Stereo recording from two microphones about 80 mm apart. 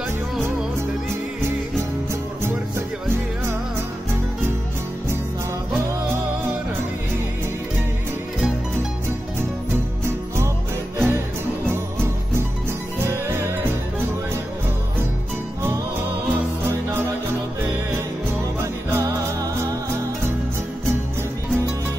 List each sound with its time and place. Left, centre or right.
10.0 s music: right
11.0 s jingle bell: right
11.7 s music: right
16.6 s music: right
18.6 s music: right